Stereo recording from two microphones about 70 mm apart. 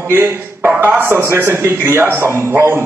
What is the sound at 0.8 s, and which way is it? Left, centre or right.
A man's voice, right.